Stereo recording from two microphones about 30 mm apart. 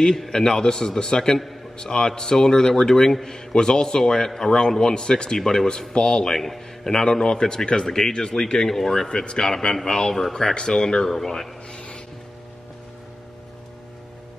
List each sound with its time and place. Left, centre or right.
0.0 s a man's voice: centre
6.9 s a man's voice: left
7.9 s a man's voice: centre
9.1 s speech: left
9.4 s a man's voice: left
10.1 s a man's voice: centre
10.4 s a man's voice: left
11.1 s a man's voice: centre
11.7 s rub: left